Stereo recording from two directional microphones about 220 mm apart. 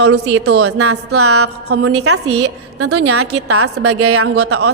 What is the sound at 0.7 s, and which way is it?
A woman's voice, 85° right.